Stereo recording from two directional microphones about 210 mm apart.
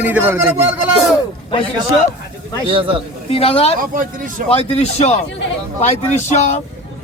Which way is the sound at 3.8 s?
40° right (ahead or behind).